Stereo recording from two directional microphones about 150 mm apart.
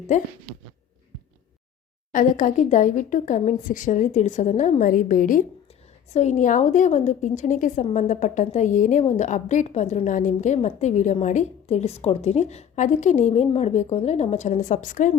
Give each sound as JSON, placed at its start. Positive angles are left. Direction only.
{"t": 0.1, "sound": "a woman's voice", "side_deg": 55}
{"t": 2.1, "sound": "a woman's voice", "side_deg": 60}
{"t": 6.1, "sound": "a woman's voice", "side_deg": 50}